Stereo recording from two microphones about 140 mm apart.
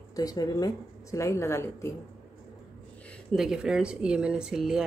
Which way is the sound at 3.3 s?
5° right (ahead or behind).